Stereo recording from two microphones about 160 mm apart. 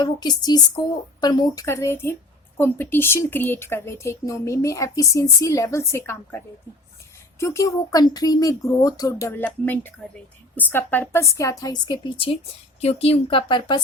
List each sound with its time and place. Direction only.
0.0 s speech: 25° left (ahead or behind)